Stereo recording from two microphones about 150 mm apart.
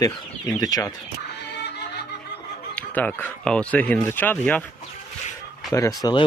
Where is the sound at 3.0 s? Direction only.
5° left (ahead or behind).